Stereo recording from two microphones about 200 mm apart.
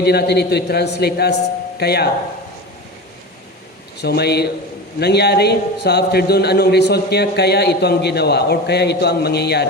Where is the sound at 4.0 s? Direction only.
55° left (ahead or behind).